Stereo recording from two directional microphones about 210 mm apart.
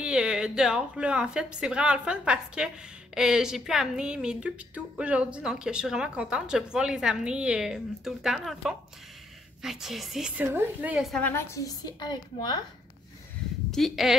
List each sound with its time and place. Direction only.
0.0 s speech: 5° right (ahead or behind); by 12.5 s 20° left (ahead or behind)
13.7 s speech: centre (ahead or behind)